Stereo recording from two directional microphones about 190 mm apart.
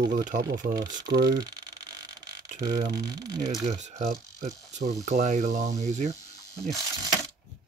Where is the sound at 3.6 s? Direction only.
35° right (ahead or behind).